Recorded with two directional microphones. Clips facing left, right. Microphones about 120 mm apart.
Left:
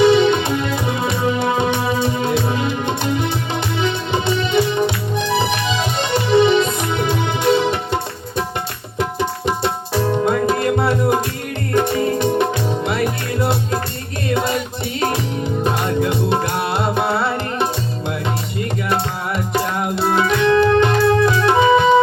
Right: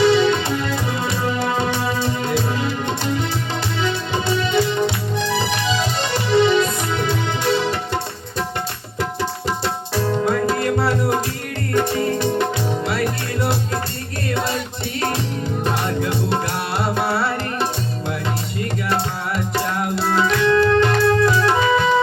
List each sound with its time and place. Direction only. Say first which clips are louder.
0.0 s music: left 3 dB; 20° left (ahead or behind)
9.0 s tabla: left 3 dB; 20° left (ahead or behind)
11.7 s music: left 2 dB; 20° left (ahead or behind)
15.6 s music: left 3 dB; 20° left (ahead or behind)
19.5 s music: left 3 dB; 20° left (ahead or behind)